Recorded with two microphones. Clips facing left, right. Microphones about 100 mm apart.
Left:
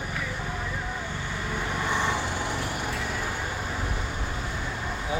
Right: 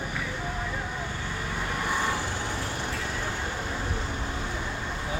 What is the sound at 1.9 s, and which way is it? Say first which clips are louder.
Vehicle: left 2 dB; 20° left (ahead or behind).